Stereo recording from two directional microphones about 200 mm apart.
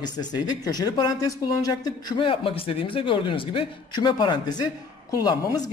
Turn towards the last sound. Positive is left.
turn(degrees=20)  # may be behind; listen again after turning